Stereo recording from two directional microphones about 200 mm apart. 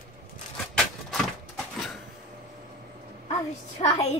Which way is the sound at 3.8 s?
30° left (ahead or behind).